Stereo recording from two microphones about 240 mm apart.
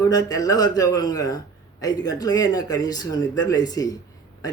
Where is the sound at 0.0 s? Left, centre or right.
Centre.